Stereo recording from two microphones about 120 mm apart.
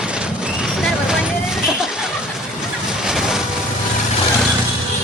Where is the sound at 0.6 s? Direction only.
5° right (ahead or behind).